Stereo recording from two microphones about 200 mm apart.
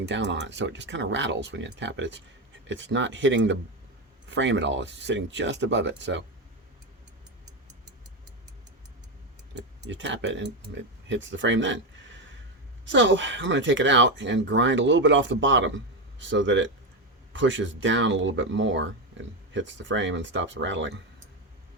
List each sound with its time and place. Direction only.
0.0 s speech: 60° right (ahead or behind)
9.6 s speech: 60° right (ahead or behind)